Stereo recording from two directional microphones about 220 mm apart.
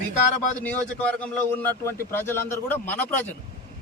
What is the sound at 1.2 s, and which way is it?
Speech, 10° left (ahead or behind).